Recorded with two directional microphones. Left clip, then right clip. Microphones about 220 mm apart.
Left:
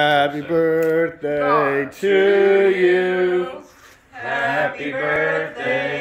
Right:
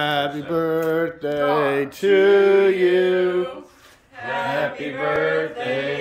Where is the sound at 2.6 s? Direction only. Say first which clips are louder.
Left 1 dB; 15° right (ahead or behind).